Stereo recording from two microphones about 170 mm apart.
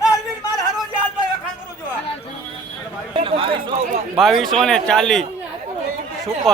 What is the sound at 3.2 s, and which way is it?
Speech, 30° right (ahead or behind).